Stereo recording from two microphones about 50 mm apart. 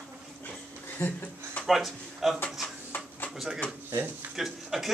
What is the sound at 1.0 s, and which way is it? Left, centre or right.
Speech, left.